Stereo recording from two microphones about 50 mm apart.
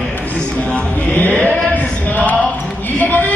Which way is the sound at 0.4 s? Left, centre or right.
Left.